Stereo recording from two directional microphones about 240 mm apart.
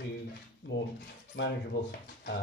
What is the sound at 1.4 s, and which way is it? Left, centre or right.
Speech, left.